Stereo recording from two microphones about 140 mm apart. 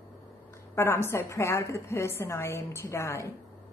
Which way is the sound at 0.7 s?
20° left (ahead or behind).